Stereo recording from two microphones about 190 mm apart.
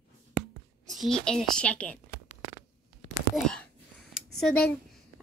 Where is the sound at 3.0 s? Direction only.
30° left (ahead or behind).